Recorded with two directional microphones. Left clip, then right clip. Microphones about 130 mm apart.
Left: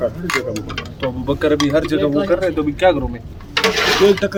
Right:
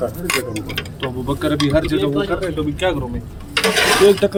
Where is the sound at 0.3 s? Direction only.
20° right (ahead or behind).